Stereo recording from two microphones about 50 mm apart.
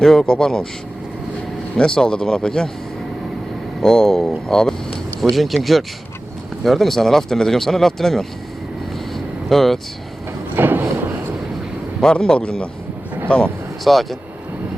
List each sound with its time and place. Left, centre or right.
0.0 s speech: centre
1.8 s speech: centre
3.8 s speech: centre
9.1 s vehicle: centre
10.5 s a sound: right
12.1 s speech: left
13.8 s speech: centre